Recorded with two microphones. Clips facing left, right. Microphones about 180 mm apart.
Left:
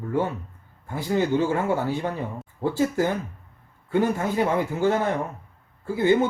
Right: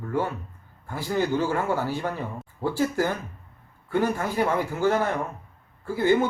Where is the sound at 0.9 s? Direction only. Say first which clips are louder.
Left 2 dB; 20° left (ahead or behind).